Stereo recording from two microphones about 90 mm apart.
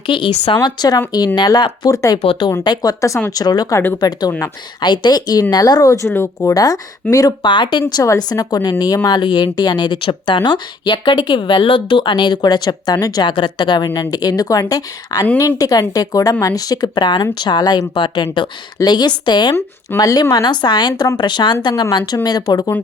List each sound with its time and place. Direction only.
0.1 s speech: 60° left (ahead or behind); by 2.1 s 40° left (ahead or behind)
2.2 s speech: 90° left
2.6 s speech: 40° left (ahead or behind)
4.3 s speech: 25° left (ahead or behind)
4.8 s speech: 55° left (ahead or behind); by 6.5 s 30° left (ahead or behind)
6.5 s speech: 45° left (ahead or behind)
7.4 s speech: 60° left (ahead or behind)
8.0 s speech: 40° left (ahead or behind)
10.0 s speech: 65° left (ahead or behind)
20.0 s speech: 45° left (ahead or behind)